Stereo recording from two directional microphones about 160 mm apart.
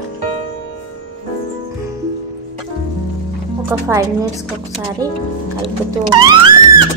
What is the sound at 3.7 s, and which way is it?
Speech, 20° right (ahead or behind).